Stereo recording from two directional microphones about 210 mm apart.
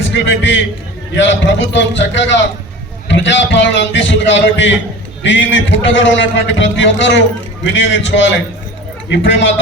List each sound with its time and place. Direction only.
0.1 s a man's voice: 60° left (ahead or behind)